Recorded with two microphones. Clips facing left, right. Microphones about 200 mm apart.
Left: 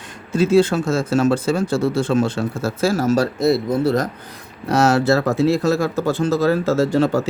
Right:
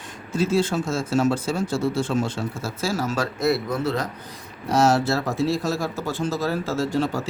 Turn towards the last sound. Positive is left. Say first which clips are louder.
# left 7 dB
turn(degrees=80)